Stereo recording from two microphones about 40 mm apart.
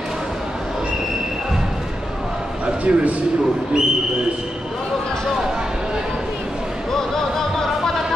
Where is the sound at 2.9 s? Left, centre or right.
Right.